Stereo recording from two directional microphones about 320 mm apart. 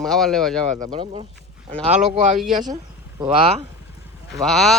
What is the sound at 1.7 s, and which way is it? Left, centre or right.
Speech, centre.